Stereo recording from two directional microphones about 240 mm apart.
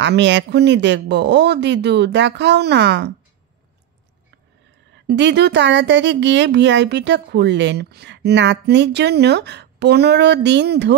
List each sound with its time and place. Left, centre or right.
0.0 s speech: right
5.0 s speech: right